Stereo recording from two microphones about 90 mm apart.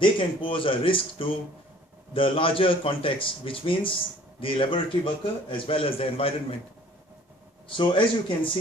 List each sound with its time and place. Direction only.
0.0 s speech: 75° left (ahead or behind)
2.1 s a man's voice: 90° left
7.6 s speech: 70° left (ahead or behind)